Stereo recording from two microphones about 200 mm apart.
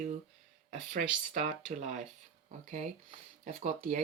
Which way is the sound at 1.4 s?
35° right (ahead or behind).